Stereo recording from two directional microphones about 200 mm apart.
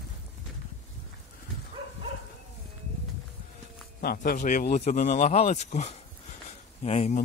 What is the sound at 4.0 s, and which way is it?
Speech, 45° left (ahead or behind).